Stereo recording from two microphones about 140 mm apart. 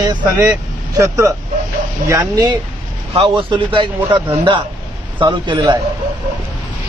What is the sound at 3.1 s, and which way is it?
Speech, 40° right (ahead or behind).